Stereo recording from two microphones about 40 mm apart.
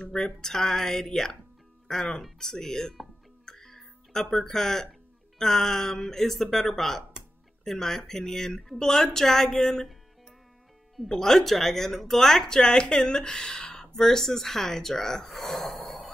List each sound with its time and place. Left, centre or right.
0.0 s speech: centre
3.4 s music: centre
5.4 s speech: centre
11.1 s speech: centre
15.3 s a sound: centre